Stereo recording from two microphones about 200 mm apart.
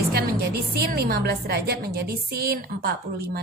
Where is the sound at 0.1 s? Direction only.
50° right (ahead or behind).